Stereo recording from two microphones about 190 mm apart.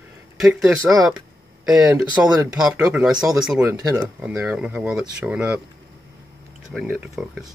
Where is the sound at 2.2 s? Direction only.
10° right (ahead or behind).